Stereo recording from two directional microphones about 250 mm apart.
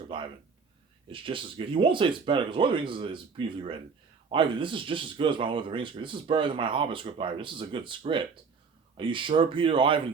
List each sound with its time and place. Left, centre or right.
0.1 s speech: centre